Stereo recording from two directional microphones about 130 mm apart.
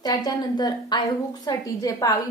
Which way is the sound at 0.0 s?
30° left (ahead or behind).